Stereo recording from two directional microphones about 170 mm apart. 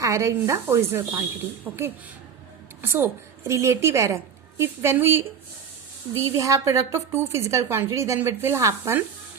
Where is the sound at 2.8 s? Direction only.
15° right (ahead or behind).